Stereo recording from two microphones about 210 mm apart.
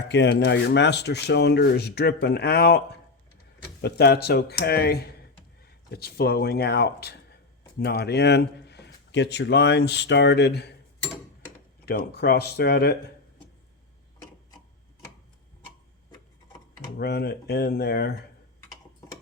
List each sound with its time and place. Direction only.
0.1 s speech: 55° left (ahead or behind)
11.9 s speech: 50° left (ahead or behind)
17.0 s speech: 50° left (ahead or behind)